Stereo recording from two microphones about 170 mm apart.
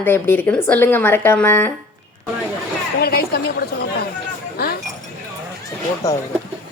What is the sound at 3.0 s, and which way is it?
Speech, 70° left (ahead or behind).